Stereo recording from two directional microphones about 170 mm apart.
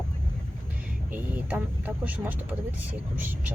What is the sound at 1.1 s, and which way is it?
Speech, 10° right (ahead or behind).